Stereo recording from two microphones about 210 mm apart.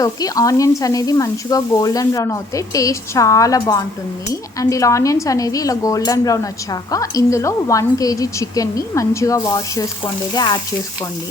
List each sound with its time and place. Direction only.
0.0 s speech: 15° left (ahead or behind)
10.3 s frying: 20° left (ahead or behind)